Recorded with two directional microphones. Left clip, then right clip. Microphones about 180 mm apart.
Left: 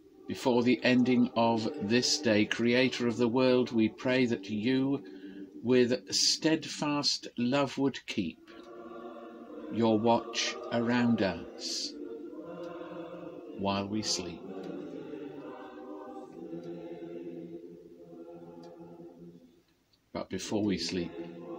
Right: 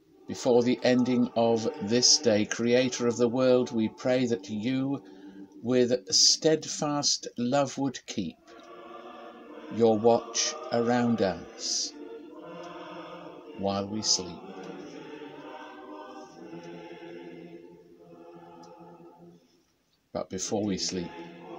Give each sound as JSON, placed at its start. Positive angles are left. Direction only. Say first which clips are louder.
{"t": 0.3, "sound": "speech", "louder": "right 4 dB", "side_deg": -20}
{"t": 9.8, "sound": "speech", "louder": "right 5 dB", "side_deg": -20}
{"t": 13.7, "sound": "speech", "louder": "right 4 dB", "side_deg": -20}
{"t": 20.1, "sound": "speech", "louder": "right 4 dB", "side_deg": -20}